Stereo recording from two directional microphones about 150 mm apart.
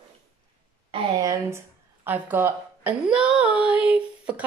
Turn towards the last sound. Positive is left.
turn(degrees=-10)  # may be behind; listen again after turning